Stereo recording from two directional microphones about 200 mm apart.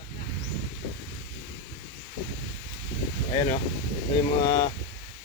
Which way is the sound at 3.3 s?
20° left (ahead or behind).